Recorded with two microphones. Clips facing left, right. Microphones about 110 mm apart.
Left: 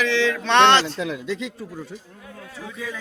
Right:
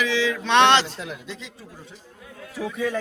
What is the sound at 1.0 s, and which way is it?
Speech, 65° left (ahead or behind).